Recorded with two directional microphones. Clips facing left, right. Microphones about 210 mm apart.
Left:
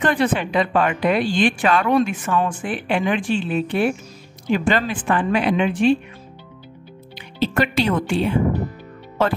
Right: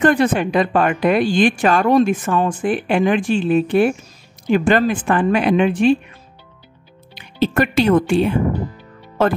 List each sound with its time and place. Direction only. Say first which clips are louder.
0.0 s speech: right 5 dB; 45° right (ahead or behind)
7.2 s speech: right 3 dB; 50° right (ahead or behind)